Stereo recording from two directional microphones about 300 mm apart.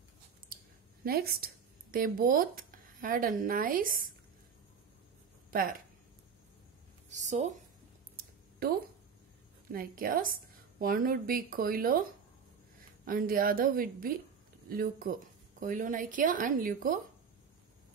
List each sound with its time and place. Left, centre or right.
1.0 s speech: right
5.5 s speech: right
7.1 s speech: right
9.7 s speech: right
13.0 s speech: right